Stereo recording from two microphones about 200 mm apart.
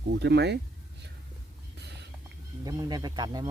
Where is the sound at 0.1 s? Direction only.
60° right (ahead or behind).